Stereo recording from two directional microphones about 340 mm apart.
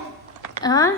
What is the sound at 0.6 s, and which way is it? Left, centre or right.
Speech, centre.